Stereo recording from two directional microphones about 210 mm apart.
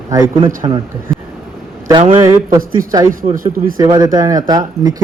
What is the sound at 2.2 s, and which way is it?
Speech, 10° right (ahead or behind).